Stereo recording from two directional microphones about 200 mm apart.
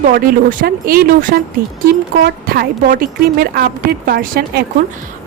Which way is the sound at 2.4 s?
50° right (ahead or behind).